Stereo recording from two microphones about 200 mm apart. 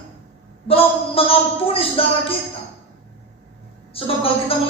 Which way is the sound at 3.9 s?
30° left (ahead or behind).